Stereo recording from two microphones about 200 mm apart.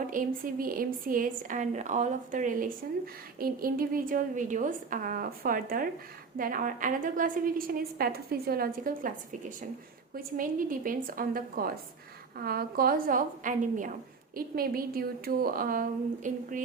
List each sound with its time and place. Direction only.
0.1 s a woman's voice: 45° right (ahead or behind)
10.2 s a woman's voice: 45° right (ahead or behind)